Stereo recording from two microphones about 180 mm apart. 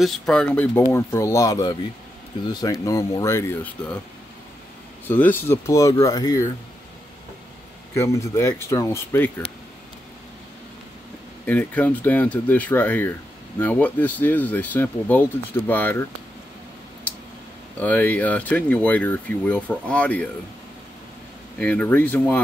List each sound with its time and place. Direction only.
0.0 s speech: 5° left (ahead or behind)
5.0 s speech: 10° left (ahead or behind)
7.9 s speech: 15° left (ahead or behind)
11.4 s speech: 10° left (ahead or behind)
17.7 s speech: 10° left (ahead or behind)
21.5 s speech: 10° left (ahead or behind)